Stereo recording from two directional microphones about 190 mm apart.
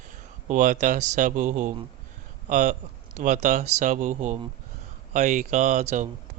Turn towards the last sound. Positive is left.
turn(degrees=-40)  # may be behind; listen again after turning